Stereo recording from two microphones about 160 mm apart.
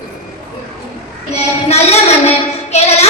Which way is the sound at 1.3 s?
40° left (ahead or behind).